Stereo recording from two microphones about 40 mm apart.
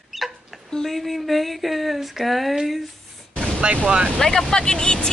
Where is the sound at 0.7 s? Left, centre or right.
Centre.